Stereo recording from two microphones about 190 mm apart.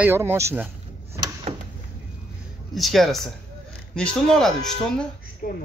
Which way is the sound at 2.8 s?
Centre (ahead or behind).